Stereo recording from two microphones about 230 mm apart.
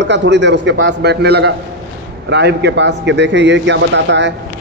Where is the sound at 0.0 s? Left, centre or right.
Right.